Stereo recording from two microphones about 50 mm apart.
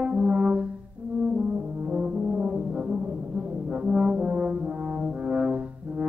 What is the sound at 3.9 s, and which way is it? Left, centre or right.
Brass instrument, centre.